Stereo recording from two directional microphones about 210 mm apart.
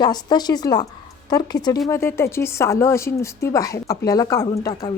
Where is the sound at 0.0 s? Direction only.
20° left (ahead or behind).